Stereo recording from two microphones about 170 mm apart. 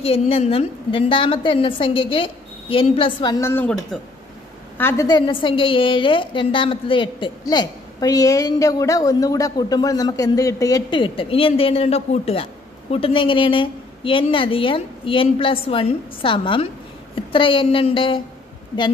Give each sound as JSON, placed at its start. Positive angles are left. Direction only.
{"t": 0.0, "sound": "a woman's voice", "side_deg": 35}
{"t": 3.3, "sound": "a woman's voice", "side_deg": 15}
{"t": 4.7, "sound": "a woman's voice", "side_deg": 15}